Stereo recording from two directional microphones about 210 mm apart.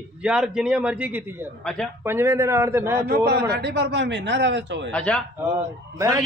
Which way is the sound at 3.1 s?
50° right (ahead or behind).